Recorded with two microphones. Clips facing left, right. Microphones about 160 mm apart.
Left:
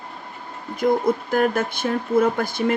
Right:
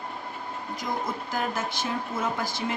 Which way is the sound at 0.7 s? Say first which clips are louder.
Left 13 dB; 55° left (ahead or behind).